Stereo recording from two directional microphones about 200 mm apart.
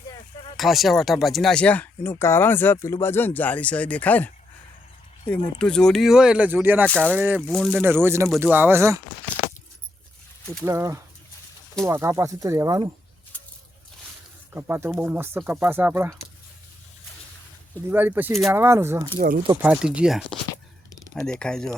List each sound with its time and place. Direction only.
0.5 s speech: centre (ahead or behind)
5.5 s speech: 5° left (ahead or behind)
6.8 s speech: 5° left (ahead or behind)
7.1 s speech: 10° right (ahead or behind)
7.4 s speech: centre (ahead or behind)
7.8 s speech: 10° right (ahead or behind)
10.6 s speech: 15° right (ahead or behind)
14.5 s speech: 10° right (ahead or behind)
17.8 s speech: 10° right (ahead or behind)